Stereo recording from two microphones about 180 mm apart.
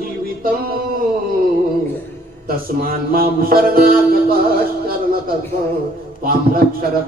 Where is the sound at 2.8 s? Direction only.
55° right (ahead or behind).